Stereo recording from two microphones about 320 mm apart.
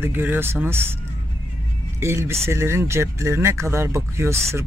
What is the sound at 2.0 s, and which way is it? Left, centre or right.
Speech, centre.